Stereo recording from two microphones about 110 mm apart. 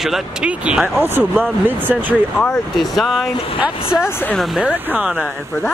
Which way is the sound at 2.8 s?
Centre (ahead or behind).